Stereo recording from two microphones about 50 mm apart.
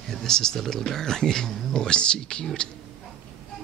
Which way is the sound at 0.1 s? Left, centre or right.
Centre.